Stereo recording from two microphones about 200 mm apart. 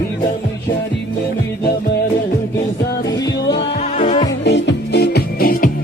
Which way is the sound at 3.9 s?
35° left (ahead or behind).